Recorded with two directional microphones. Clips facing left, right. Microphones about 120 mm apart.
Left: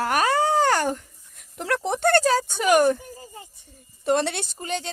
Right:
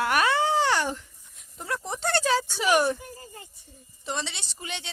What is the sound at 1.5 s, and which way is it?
Speech, 65° left (ahead or behind).